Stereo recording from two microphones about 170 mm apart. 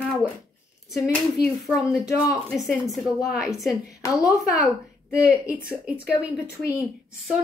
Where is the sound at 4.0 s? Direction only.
20° left (ahead or behind).